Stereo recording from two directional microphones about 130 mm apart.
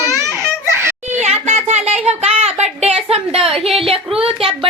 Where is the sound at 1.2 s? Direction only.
55° right (ahead or behind).